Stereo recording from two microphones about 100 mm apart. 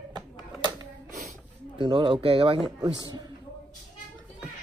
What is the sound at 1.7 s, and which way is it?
Speech, 55° right (ahead or behind).